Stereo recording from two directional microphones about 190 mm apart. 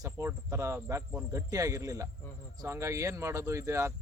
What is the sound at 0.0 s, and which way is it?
Speech, 15° right (ahead or behind).